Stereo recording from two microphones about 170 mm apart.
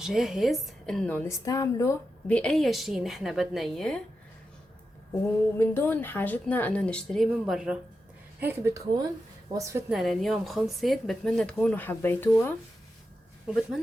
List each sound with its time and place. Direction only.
0.0 s speech: centre (ahead or behind)
1.5 s speech: 20° left (ahead or behind)
2.2 s speech: 5° left (ahead or behind)
5.5 s speech: 15° left (ahead or behind); by 7.8 s 5° right (ahead or behind)
8.4 s speech: 15° right (ahead or behind)
9.9 s speech: centre (ahead or behind)